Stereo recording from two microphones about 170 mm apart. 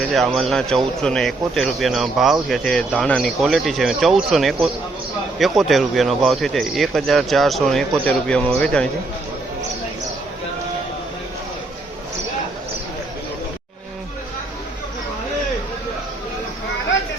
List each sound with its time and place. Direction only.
0.1 s speech: centre (ahead or behind)